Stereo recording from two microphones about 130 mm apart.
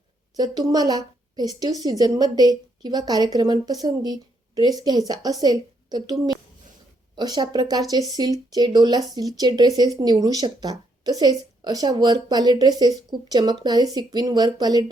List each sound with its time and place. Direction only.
0.3 s speech: 30° right (ahead or behind)